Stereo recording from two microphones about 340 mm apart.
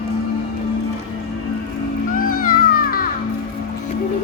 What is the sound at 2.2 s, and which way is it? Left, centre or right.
Music, left.